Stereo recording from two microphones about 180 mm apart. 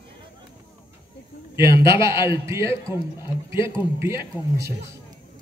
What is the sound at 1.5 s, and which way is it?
A man's voice, 15° right (ahead or behind).